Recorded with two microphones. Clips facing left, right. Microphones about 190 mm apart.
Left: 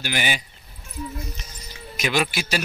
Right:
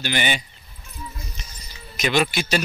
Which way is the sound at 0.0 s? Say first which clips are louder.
Right 2 dB; 5° left (ahead or behind).